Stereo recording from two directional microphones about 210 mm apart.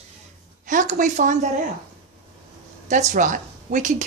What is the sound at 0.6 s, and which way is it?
Speech, 35° right (ahead or behind).